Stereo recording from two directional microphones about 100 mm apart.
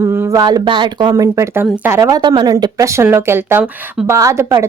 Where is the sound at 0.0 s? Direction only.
35° right (ahead or behind).